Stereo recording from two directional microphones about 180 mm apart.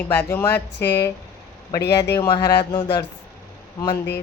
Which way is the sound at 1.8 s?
65° left (ahead or behind).